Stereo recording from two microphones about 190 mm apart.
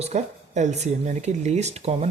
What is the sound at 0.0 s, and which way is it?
Speech, 40° right (ahead or behind).